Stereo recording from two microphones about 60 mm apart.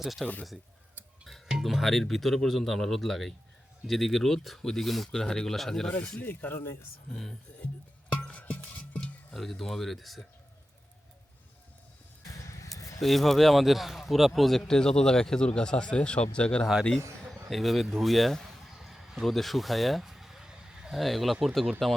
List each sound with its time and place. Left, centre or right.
0.0 s speech: centre
1.6 s speech: centre
6.2 s speech: left
8.1 s music: left
9.3 s speech: centre
12.6 s a sound: left
13.0 s speech: centre
17.5 s speech: centre
18.0 s a sound: centre
20.9 s speech: centre